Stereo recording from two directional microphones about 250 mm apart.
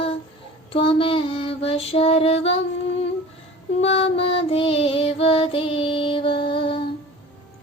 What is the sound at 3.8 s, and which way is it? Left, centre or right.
Child singing, left.